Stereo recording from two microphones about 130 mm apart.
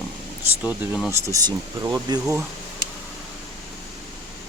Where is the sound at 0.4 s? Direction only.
15° right (ahead or behind).